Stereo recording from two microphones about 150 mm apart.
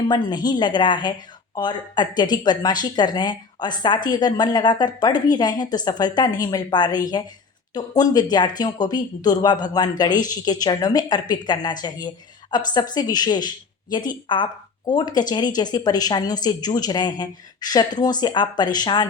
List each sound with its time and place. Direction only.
0.1 s speech: 30° left (ahead or behind)